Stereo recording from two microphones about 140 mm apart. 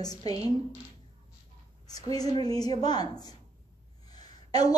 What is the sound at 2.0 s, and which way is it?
A woman's voice, 25° left (ahead or behind).